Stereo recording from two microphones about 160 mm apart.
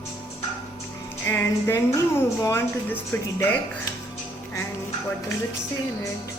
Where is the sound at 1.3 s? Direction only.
15° left (ahead or behind).